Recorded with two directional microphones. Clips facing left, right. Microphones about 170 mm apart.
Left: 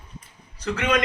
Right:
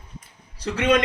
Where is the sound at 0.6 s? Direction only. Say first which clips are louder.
Right 3 dB; 35° right (ahead or behind).